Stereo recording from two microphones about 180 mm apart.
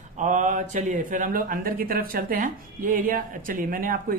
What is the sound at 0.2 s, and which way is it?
Speech, 45° right (ahead or behind).